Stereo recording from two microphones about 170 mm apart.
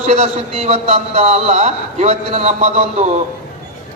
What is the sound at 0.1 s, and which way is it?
A man's voice, 40° right (ahead or behind).